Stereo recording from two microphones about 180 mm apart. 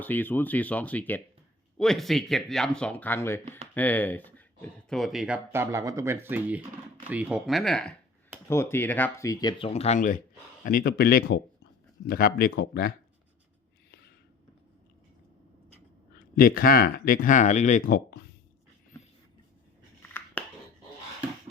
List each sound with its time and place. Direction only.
0.0 s speech: 10° left (ahead or behind); by 12.9 s 55° left (ahead or behind)
16.3 s speech: 55° left (ahead or behind)
20.0 s a sound: 10° left (ahead or behind)